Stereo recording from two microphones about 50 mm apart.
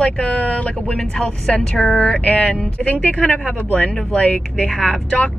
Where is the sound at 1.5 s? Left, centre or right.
Left.